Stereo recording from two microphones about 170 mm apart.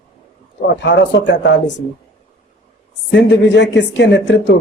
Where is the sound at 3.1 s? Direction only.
90° left.